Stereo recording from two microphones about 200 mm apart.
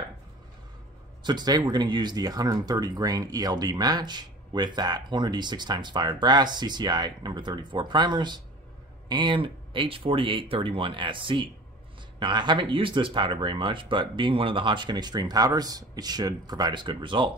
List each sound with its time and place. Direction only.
1.2 s speech: 20° right (ahead or behind)